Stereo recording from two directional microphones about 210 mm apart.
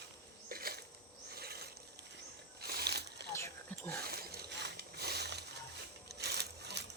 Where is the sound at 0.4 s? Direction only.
45° right (ahead or behind).